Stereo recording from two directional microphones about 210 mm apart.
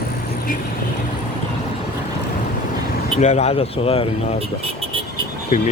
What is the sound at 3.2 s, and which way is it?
Speech, 30° left (ahead or behind).